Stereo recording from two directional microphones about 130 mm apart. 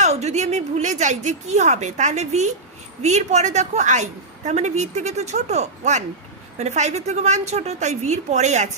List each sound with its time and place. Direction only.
0.0 s a woman's voice: 60° right (ahead or behind)